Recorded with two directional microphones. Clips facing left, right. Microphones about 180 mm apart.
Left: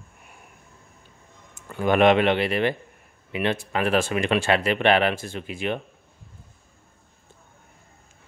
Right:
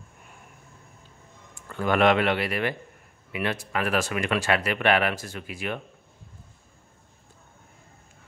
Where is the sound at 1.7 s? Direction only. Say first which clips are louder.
Left 3 dB; 20° left (ahead or behind).